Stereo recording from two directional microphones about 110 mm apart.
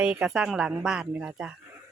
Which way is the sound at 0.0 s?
10° right (ahead or behind).